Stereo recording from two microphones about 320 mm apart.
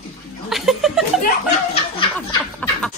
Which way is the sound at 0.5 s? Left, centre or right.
Centre.